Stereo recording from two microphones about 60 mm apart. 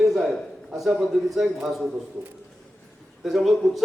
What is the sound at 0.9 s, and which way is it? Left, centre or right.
Speech, centre.